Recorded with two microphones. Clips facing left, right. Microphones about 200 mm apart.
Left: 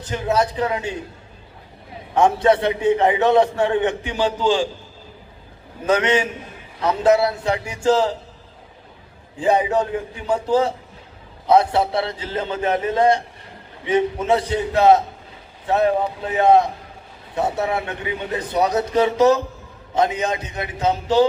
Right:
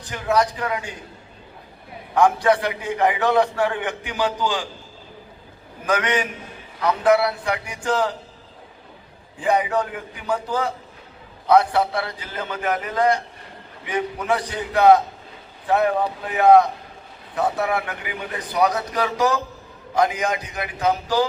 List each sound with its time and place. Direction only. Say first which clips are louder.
0.0 s a man's voice: left 1 dB; 25° left (ahead or behind)
2.1 s a man's voice: left 2 dB; 25° left (ahead or behind)
5.8 s a man's voice: left 4 dB; 25° left (ahead or behind)
9.4 s a man's voice: left 3 dB; 25° left (ahead or behind)